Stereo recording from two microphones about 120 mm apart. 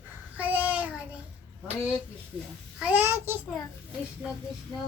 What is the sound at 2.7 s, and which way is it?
Speech, 15° right (ahead or behind).